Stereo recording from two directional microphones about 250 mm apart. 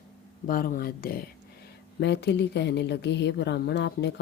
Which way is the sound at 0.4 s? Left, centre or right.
Left.